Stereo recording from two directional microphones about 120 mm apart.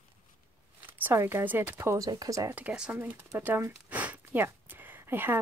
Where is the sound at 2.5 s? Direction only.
10° right (ahead or behind).